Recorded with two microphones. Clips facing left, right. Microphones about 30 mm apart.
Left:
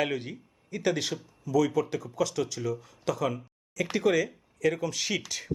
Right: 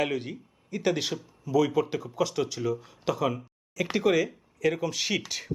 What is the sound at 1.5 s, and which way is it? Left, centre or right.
Speech, centre.